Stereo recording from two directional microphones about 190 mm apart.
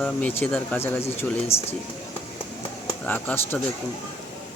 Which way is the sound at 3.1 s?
10° left (ahead or behind).